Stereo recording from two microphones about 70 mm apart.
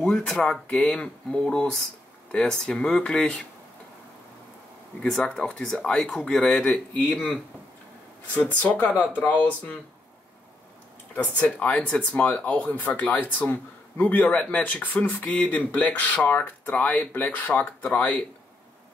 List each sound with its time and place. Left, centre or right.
0.0 s speech: centre
5.0 s speech: centre
7.0 s speech: left
8.7 s speech: left
11.6 s speech: centre